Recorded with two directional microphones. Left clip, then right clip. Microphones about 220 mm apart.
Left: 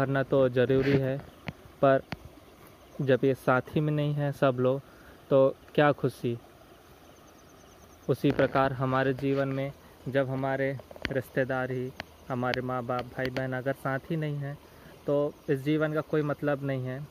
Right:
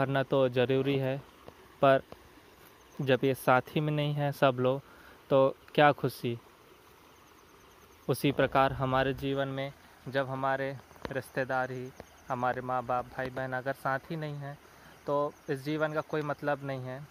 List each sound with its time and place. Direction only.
0.0 s speech: 40° right (ahead or behind)
3.1 s speech: 40° right (ahead or behind)
8.1 s speech: 40° right (ahead or behind)
9.4 s speech: 20° right (ahead or behind)
10.1 s speech: 10° right (ahead or behind)